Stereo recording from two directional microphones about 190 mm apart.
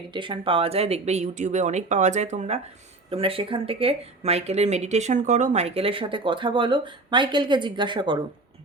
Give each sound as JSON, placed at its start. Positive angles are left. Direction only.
{"t": 0.1, "sound": "speech", "side_deg": -25}